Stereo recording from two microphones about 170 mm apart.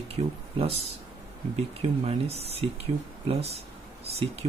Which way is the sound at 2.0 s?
35° right (ahead or behind).